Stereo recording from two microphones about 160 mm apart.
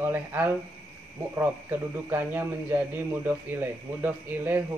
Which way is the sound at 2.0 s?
15° right (ahead or behind).